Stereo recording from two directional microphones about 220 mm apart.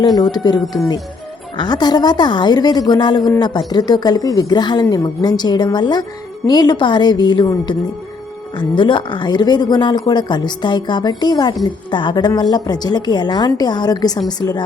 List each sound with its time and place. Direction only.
0.2 s a woman's voice: 20° left (ahead or behind)